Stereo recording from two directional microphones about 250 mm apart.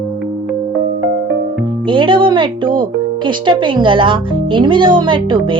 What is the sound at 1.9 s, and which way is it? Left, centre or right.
Speech, centre.